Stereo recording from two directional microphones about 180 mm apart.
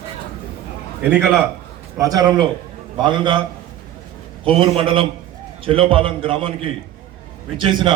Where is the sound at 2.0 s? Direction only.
20° right (ahead or behind).